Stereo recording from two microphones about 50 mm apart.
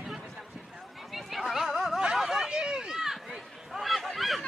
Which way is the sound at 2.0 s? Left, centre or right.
Centre.